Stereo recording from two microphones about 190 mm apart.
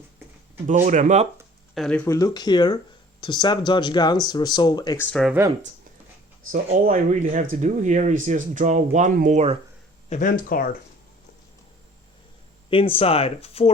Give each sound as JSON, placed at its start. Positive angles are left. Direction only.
{"t": 0.7, "sound": "speech", "side_deg": -40}
{"t": 1.7, "sound": "speech", "side_deg": 5}
{"t": 6.5, "sound": "speech", "side_deg": -45}
{"t": 10.1, "sound": "speech", "side_deg": 45}
{"t": 12.7, "sound": "speech", "side_deg": 30}